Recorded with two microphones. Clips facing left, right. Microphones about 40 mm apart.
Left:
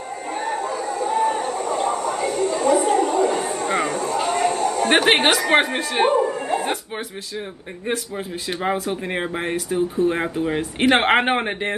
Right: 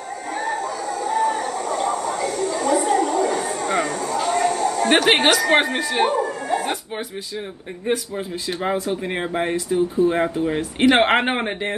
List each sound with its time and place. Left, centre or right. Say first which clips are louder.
0.3 s chicken: even; left
5.2 s a woman's voice: right 1 dB; left
5.6 s speech: even; centre
5.9 s a sound: left 3 dB; left
8.6 s speech: even; centre